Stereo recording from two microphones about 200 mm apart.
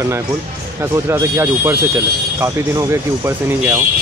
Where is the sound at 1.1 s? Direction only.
15° right (ahead or behind).